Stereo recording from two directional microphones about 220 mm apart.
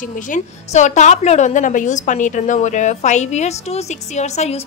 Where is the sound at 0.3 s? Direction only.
30° left (ahead or behind).